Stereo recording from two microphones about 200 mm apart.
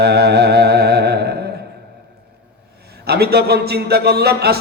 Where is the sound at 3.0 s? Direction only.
50° right (ahead or behind).